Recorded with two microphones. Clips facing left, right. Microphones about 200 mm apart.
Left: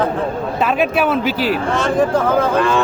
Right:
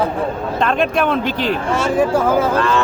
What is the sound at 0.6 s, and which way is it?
Speech, 5° left (ahead or behind).